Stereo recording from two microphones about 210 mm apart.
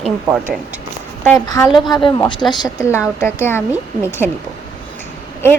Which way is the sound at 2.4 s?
5° right (ahead or behind).